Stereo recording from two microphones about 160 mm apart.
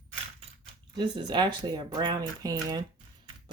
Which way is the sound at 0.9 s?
25° right (ahead or behind).